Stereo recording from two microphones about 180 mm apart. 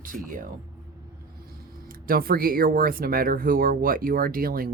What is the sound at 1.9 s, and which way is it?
Speech, 55° right (ahead or behind).